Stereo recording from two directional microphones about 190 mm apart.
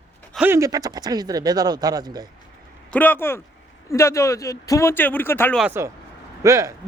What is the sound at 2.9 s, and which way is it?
Speech, 10° left (ahead or behind).